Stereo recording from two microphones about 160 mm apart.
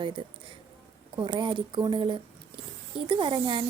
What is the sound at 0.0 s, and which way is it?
A woman's voice, 30° right (ahead or behind).